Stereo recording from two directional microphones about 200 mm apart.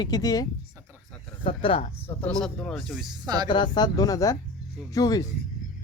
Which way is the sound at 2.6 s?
Centre (ahead or behind).